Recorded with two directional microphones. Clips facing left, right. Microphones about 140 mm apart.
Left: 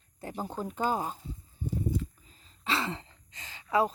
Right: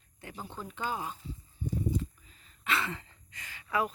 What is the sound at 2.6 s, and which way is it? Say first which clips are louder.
Throat clearing: left 2 dB; 30° left (ahead or behind).